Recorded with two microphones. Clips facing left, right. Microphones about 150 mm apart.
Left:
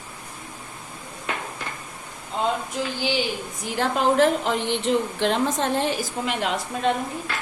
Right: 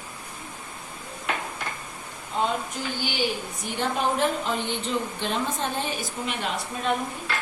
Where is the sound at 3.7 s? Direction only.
90° left.